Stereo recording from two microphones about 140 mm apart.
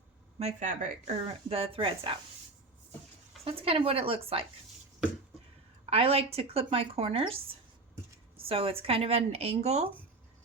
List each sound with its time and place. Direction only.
0.3 s speech: 55° right (ahead or behind); by 2.1 s 40° right (ahead or behind)
3.4 s speech: 40° right (ahead or behind)
5.8 s speech: 45° right (ahead or behind)
8.4 s speech: 40° right (ahead or behind)